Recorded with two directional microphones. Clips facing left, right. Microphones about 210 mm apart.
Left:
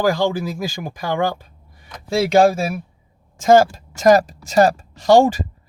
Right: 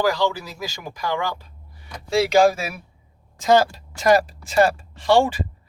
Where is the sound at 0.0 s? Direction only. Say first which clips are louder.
Left 3 dB; 50° left (ahead or behind).